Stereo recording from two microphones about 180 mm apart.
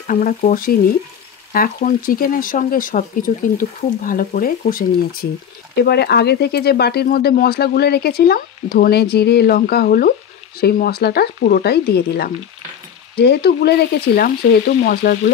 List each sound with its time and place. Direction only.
0.0 s speech: 50° left (ahead or behind)
5.8 s speech: 65° left (ahead or behind)